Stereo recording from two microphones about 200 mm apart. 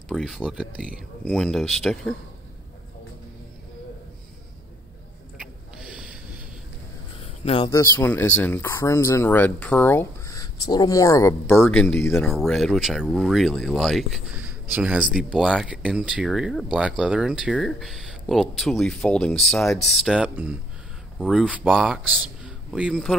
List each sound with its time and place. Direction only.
0.1 s speech: centre (ahead or behind)
5.4 s a sound: 5° right (ahead or behind)
7.4 s speech: 30° left (ahead or behind)
7.7 s speech: 10° left (ahead or behind)
11.5 s speech: 5° left (ahead or behind)
22.4 s a sound: 5° right (ahead or behind)